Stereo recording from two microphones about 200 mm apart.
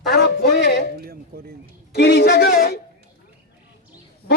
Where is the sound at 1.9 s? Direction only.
55° left (ahead or behind).